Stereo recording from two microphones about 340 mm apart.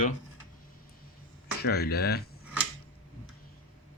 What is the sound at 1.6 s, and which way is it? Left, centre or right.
Speech, left.